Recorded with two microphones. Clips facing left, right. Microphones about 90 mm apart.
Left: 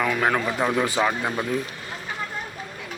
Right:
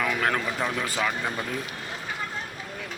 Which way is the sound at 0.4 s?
20° left (ahead or behind).